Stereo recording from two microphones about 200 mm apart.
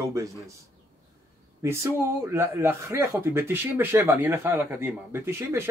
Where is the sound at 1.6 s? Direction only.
15° right (ahead or behind).